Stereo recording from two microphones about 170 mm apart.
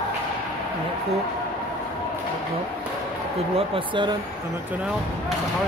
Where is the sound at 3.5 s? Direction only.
30° right (ahead or behind).